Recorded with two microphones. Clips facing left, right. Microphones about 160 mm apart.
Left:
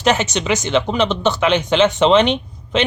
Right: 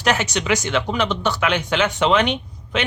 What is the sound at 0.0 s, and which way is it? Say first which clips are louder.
Speech: left 4 dB; 25° left (ahead or behind).